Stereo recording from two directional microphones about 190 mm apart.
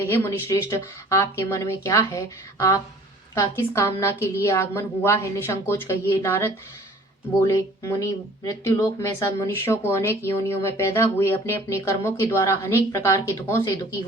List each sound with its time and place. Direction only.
0.0 s speech: 15° left (ahead or behind)